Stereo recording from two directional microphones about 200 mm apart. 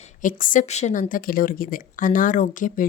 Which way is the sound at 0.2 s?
40° left (ahead or behind).